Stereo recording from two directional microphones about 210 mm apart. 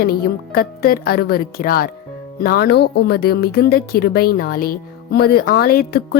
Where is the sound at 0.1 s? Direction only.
45° left (ahead or behind).